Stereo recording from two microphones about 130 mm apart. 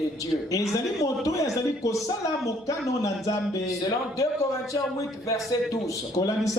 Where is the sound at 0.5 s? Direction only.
25° left (ahead or behind).